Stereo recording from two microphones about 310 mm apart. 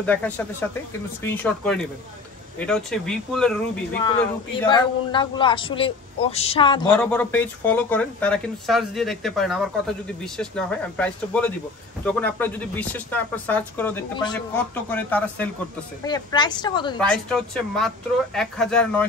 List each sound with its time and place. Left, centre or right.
0.0 s speech: centre
4.6 s speech: centre
17.0 s speech: centre